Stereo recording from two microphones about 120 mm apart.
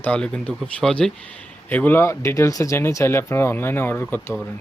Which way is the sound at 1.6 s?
15° left (ahead or behind).